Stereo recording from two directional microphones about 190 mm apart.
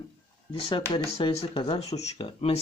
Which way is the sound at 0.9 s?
25° left (ahead or behind).